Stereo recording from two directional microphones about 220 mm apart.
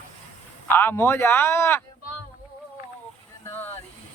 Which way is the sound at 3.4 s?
10° left (ahead or behind).